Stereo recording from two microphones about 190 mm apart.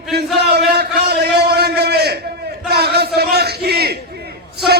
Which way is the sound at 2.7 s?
55° right (ahead or behind).